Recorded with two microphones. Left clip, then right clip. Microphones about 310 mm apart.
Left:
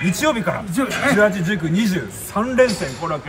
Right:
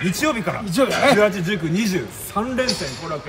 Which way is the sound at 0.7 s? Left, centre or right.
Right.